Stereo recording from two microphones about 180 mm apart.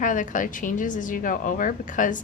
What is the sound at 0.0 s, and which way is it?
A woman's voice, 45° left (ahead or behind).